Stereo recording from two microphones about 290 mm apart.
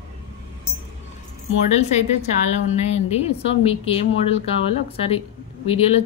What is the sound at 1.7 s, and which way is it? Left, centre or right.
A woman's voice, left.